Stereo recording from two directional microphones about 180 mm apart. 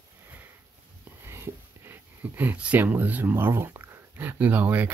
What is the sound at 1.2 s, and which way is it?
Speech, 15° right (ahead or behind).